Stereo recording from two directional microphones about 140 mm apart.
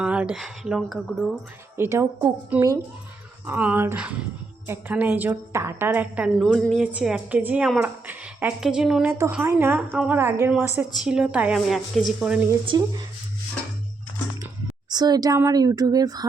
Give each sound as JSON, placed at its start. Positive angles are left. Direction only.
{"t": 0.0, "sound": "a woman's voice", "side_deg": -5}
{"t": 1.7, "sound": "a woman's voice", "side_deg": -15}
{"t": 6.4, "sound": "a woman's voice", "side_deg": 0}
{"t": 12.6, "sound": "speech", "side_deg": -30}
{"t": 14.8, "sound": "a woman's voice", "side_deg": -30}